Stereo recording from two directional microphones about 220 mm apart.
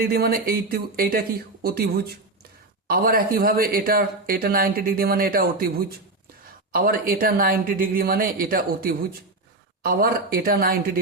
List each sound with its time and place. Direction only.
0.0 s speech: 40° right (ahead or behind)